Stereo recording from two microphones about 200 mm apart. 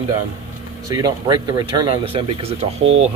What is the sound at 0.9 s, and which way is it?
Speech, 20° right (ahead or behind).